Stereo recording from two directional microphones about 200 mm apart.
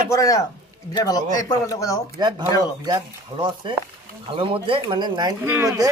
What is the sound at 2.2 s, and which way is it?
Speech, 20° right (ahead or behind).